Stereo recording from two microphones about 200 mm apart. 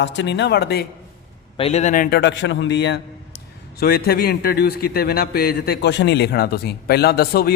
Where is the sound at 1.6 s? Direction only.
30° left (ahead or behind).